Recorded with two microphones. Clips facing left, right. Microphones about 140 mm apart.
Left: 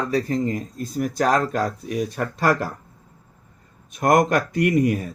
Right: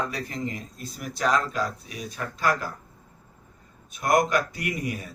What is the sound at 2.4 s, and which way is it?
Speech, 70° left (ahead or behind).